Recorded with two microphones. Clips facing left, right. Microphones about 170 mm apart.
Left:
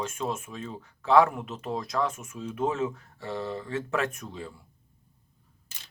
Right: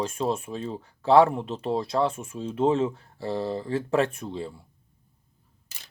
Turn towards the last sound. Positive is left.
turn(degrees=-30)  # may be behind; listen again after turning